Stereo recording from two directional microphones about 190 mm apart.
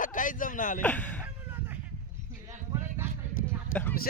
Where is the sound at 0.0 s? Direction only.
45° left (ahead or behind).